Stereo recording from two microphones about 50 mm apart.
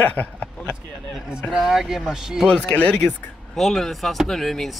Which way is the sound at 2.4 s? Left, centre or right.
Left.